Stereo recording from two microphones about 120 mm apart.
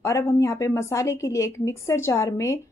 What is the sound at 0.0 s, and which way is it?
Speech, 25° left (ahead or behind).